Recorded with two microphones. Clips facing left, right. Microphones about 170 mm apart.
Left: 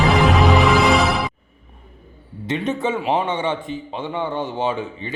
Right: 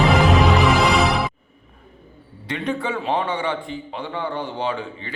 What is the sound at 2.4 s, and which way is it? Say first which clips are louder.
A man's voice: left 3 dB; 20° left (ahead or behind).